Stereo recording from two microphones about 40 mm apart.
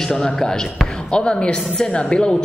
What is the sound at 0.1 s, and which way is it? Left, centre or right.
A woman's voice, centre.